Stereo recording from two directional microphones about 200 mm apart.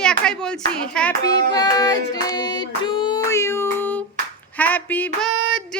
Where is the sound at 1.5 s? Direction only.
20° left (ahead or behind).